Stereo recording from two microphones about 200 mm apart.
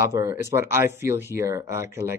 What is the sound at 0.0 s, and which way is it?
Speech, 15° right (ahead or behind).